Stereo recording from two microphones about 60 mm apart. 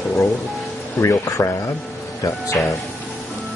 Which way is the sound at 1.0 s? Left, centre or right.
Left.